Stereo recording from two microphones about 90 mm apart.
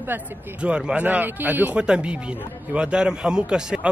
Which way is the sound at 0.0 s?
25° right (ahead or behind).